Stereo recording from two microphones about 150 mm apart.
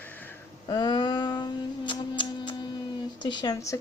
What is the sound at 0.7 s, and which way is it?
Speech, 30° left (ahead or behind).